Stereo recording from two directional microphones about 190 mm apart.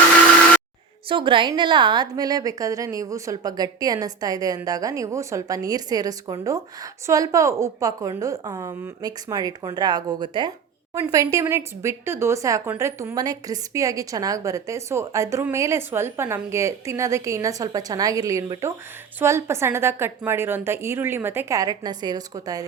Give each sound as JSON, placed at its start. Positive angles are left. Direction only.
{"t": 1.0, "sound": "a woman's voice", "side_deg": -25}